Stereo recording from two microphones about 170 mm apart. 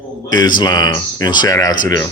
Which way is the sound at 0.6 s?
25° left (ahead or behind).